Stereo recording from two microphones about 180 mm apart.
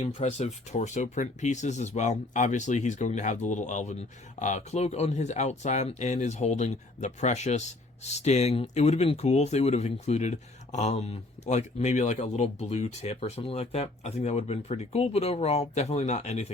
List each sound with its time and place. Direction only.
0.0 s speech: 40° left (ahead or behind)